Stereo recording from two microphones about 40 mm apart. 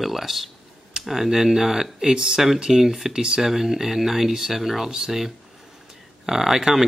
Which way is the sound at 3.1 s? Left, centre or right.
Right.